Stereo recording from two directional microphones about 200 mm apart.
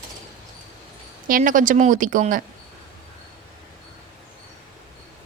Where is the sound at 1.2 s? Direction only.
45° right (ahead or behind).